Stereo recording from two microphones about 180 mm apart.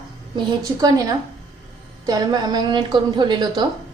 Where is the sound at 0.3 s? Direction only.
20° right (ahead or behind).